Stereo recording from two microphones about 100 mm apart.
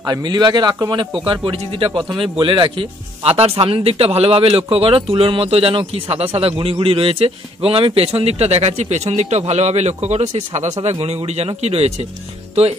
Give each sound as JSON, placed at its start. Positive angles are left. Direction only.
{"t": 0.0, "sound": "a man's voice", "side_deg": -40}